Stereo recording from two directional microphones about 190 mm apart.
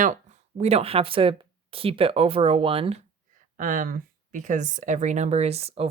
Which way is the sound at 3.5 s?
45° right (ahead or behind).